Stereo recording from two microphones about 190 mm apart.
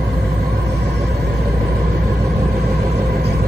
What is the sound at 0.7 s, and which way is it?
Vehicle, 60° right (ahead or behind).